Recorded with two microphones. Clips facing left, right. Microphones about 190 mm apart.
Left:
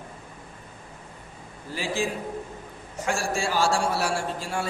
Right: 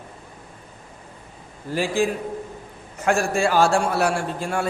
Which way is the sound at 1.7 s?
50° right (ahead or behind).